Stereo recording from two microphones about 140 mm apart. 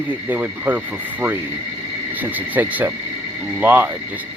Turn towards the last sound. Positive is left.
turn(degrees=-15)  # may be behind; listen again after turning